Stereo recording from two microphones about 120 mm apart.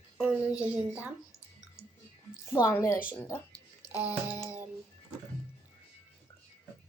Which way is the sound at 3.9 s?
15° right (ahead or behind).